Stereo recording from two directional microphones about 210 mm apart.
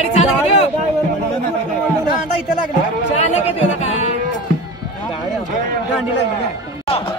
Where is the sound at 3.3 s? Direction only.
30° left (ahead or behind).